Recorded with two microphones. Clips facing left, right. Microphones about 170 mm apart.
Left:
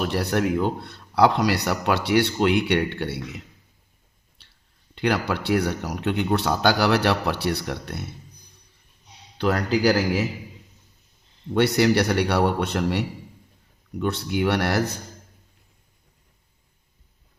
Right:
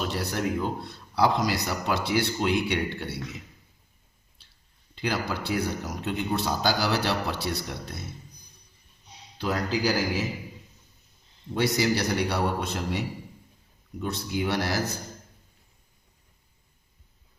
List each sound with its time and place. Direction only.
0.0 s speech: 65° left (ahead or behind)
4.9 s speech: 65° left (ahead or behind)
9.4 s speech: 70° left (ahead or behind)
11.5 s speech: 65° left (ahead or behind)